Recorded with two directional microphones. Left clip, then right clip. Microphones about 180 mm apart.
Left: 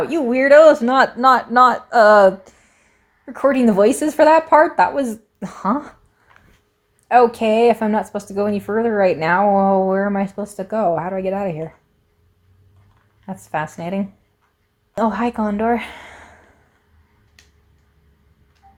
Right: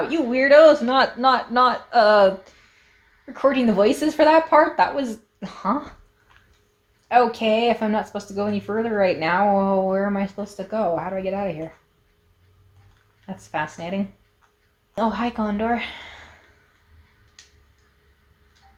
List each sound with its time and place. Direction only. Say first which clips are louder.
0.1 s speech: left 4 dB; 45° left (ahead or behind)
13.2 s speech: left 3 dB; 45° left (ahead or behind)